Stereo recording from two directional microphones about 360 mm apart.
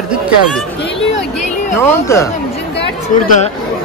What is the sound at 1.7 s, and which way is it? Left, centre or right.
Speech, centre.